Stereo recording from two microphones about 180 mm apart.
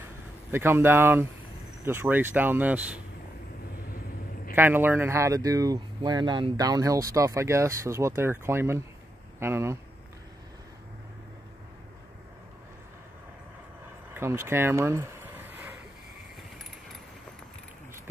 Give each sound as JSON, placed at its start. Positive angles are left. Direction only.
{"t": 0.5, "sound": "speech", "side_deg": -15}
{"t": 4.6, "sound": "speech", "side_deg": -10}
{"t": 14.1, "sound": "a sound", "side_deg": -15}